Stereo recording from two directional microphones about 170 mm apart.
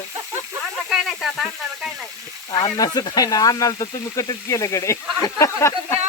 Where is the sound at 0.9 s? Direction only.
5° right (ahead or behind).